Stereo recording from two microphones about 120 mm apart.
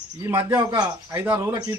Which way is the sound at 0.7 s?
35° right (ahead or behind).